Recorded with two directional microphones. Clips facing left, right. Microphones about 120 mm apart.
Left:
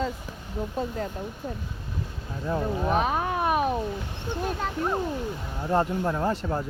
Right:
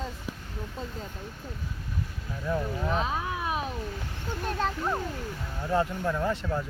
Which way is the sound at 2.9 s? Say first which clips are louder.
Left 5 dB; 60° left (ahead or behind).